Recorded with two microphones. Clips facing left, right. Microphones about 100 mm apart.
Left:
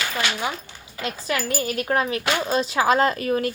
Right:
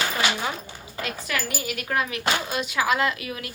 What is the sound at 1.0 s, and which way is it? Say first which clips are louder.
A woman's voice: left 4 dB; 30° left (ahead or behind).